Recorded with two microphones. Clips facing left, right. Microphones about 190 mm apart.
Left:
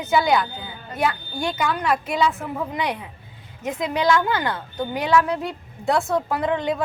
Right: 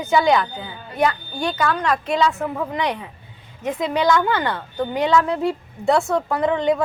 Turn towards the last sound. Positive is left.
turn(degrees=5)  # may be behind; listen again after turning